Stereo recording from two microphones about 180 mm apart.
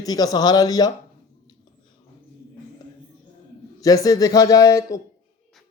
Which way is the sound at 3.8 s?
20° left (ahead or behind).